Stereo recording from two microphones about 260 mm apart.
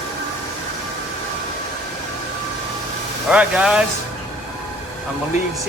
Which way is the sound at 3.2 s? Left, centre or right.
Centre.